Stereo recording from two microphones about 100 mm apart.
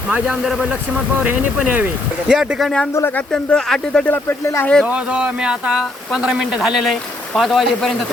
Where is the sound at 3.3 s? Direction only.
5° left (ahead or behind).